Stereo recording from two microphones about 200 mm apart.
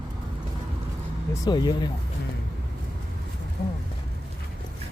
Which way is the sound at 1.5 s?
20° left (ahead or behind).